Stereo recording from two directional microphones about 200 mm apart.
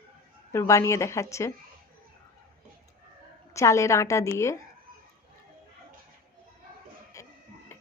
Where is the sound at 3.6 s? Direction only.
15° left (ahead or behind).